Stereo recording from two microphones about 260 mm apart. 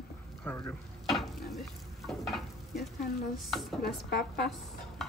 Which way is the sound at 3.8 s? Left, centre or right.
Left.